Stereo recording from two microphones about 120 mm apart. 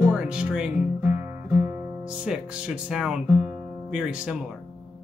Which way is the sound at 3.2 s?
20° right (ahead or behind).